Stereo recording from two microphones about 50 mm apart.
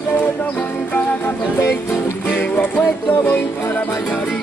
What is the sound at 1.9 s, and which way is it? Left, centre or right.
Music, left.